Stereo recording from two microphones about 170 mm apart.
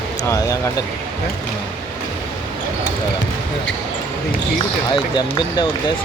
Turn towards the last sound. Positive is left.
turn(degrees=25)  # may be behind; listen again after turning